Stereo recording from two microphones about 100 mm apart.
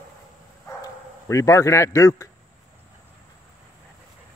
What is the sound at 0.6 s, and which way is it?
Bow-wow, 30° left (ahead or behind).